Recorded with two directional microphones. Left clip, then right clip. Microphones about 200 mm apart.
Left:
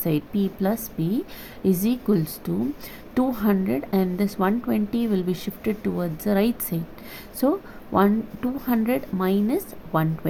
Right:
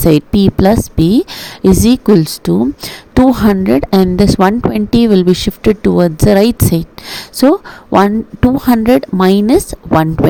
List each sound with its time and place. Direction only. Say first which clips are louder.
0.0 s speech: right 15 dB; 50° right (ahead or behind)